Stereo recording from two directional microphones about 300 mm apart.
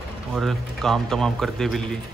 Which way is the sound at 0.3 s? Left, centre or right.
Centre.